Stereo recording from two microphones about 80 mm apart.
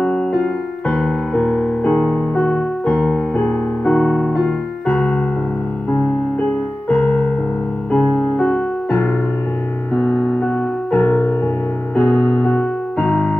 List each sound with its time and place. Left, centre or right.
0.8 s music: centre
2.4 s keyboard: centre
3.3 s music: centre
4.8 s keyboard: left
8.1 s music: left; by 12.2 s centre
12.4 s keyboard: centre